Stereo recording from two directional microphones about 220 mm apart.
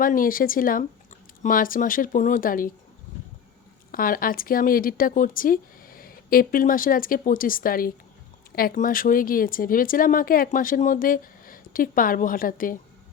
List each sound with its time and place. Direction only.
0.0 s speech: 40° left (ahead or behind)
3.9 s speech: 40° left (ahead or behind)